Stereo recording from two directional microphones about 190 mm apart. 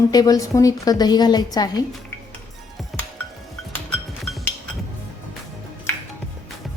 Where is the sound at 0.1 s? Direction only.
20° left (ahead or behind).